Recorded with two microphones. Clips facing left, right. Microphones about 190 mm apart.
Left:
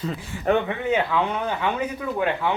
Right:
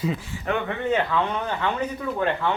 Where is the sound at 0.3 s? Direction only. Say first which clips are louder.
Left 6 dB; 60° left (ahead or behind).